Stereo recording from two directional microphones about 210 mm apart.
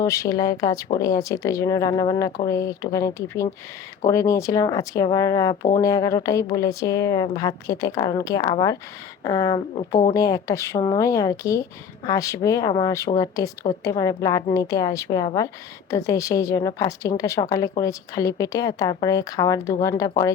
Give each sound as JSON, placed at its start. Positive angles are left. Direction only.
{"t": 0.0, "sound": "a woman's voice", "side_deg": 15}